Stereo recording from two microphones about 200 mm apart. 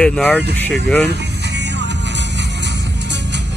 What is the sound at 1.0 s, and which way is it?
Vehicle, 60° right (ahead or behind).